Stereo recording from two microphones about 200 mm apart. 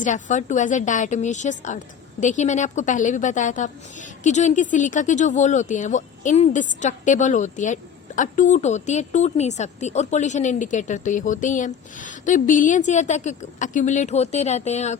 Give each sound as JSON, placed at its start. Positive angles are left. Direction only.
{"t": 0.0, "sound": "speech", "side_deg": 40}